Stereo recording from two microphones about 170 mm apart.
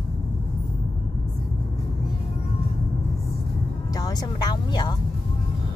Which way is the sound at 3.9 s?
25° left (ahead or behind).